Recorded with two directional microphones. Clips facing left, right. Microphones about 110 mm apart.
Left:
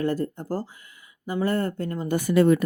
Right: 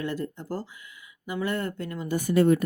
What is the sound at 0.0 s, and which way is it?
Speech, 40° left (ahead or behind).